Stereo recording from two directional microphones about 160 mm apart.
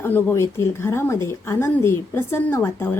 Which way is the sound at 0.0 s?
15° left (ahead or behind).